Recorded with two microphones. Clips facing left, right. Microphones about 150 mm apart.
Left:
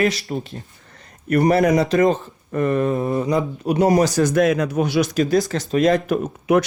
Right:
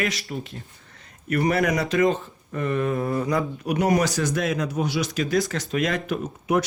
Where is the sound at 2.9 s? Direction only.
20° left (ahead or behind).